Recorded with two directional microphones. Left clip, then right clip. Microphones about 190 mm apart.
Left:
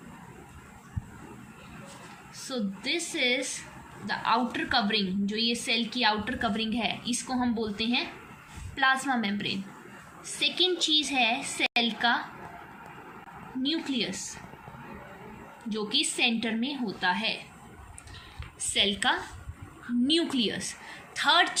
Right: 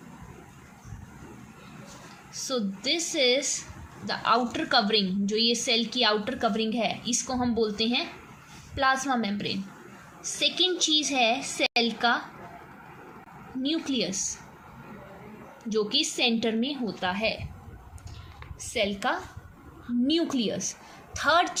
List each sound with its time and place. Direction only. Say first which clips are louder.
2.3 s a woman's voice: right 5 dB; 45° right (ahead or behind)
13.7 s a woman's voice: right 2 dB; 45° right (ahead or behind)
15.7 s a woman's voice: right 3 dB; 45° right (ahead or behind)
18.7 s a woman's voice: left 2 dB; 45° right (ahead or behind)
20.3 s a woman's voice: even; 45° right (ahead or behind)